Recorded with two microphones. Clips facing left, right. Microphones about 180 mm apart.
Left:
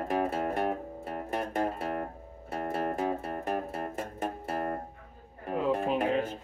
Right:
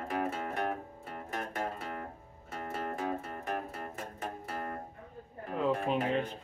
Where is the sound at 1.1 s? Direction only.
50° left (ahead or behind).